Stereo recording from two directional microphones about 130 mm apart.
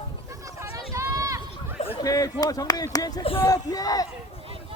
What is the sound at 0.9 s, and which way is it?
Run, 25° right (ahead or behind).